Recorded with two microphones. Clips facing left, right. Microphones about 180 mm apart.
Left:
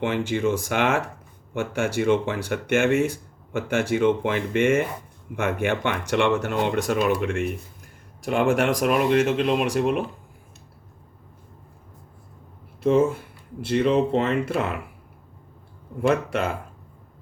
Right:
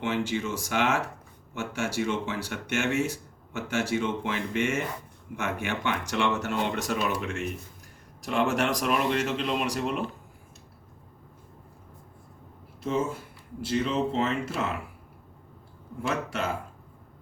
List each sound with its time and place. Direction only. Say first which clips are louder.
0.0 s speech: left 6 dB; 55° left (ahead or behind)
13.6 s speech: left 7 dB; 60° left (ahead or behind)
16.0 s speech: left 8 dB; 60° left (ahead or behind)